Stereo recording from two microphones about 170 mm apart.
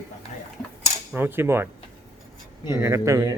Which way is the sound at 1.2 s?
15° right (ahead or behind).